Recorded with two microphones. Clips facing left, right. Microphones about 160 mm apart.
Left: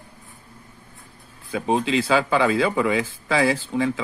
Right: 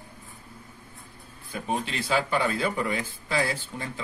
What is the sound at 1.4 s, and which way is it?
Speech, 90° left.